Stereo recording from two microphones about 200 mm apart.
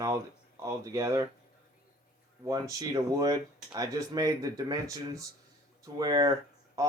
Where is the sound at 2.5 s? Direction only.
15° right (ahead or behind).